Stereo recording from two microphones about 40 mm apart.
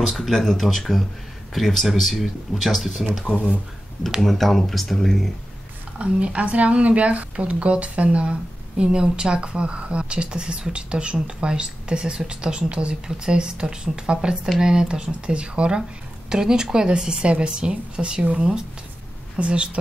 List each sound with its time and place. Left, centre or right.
0.1 s speech: centre
4.2 s speech: centre
5.9 s speech: right
19.3 s speech: right